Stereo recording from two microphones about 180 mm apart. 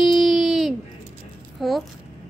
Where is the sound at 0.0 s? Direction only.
Centre (ahead or behind).